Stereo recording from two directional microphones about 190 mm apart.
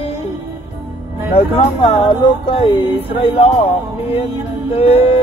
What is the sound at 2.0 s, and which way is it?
Speech, 25° left (ahead or behind).